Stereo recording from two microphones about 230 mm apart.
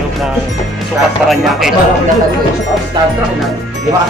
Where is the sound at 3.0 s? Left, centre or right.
Centre.